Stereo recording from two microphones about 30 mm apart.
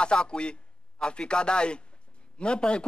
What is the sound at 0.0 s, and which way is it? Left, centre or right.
A man's voice, left.